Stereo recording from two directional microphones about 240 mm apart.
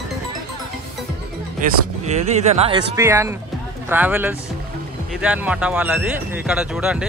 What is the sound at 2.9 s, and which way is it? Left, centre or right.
Speech, centre.